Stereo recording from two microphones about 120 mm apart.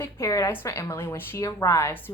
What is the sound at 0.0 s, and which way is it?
A woman's voice, 25° left (ahead or behind).